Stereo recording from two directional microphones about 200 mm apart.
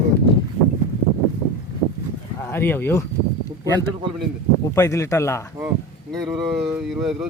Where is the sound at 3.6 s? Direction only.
20° right (ahead or behind).